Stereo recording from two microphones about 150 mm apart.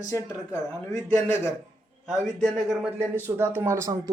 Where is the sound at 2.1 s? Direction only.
Centre (ahead or behind).